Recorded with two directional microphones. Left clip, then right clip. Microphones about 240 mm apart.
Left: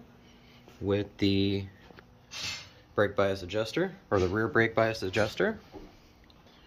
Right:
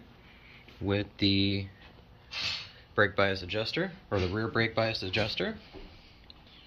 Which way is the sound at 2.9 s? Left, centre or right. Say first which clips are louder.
Even; centre.